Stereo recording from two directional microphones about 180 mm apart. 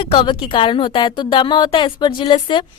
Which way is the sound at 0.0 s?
25° left (ahead or behind).